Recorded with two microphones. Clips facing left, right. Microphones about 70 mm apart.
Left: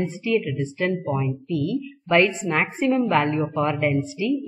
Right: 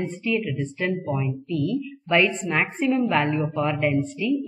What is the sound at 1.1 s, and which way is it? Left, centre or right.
Speech, centre.